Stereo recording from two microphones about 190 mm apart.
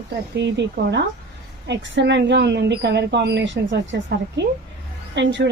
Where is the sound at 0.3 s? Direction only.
65° right (ahead or behind).